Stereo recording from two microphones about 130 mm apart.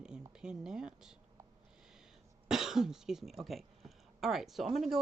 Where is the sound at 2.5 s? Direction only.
5° right (ahead or behind).